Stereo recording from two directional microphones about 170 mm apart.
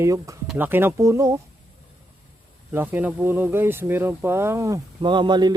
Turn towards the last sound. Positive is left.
turn(degrees=-25)  # may be behind; listen again after turning